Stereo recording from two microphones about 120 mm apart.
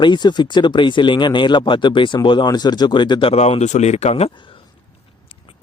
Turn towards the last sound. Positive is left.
turn(degrees=60)  # may be behind; listen again after turning